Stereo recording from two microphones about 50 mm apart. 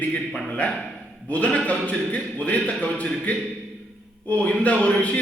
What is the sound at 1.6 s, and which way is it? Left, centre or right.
A man's voice, left.